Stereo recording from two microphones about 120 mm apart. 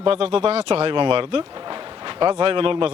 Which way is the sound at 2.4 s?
50° right (ahead or behind).